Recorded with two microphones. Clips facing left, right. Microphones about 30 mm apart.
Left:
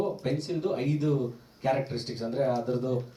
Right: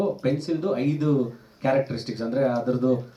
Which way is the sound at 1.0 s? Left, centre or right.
Right.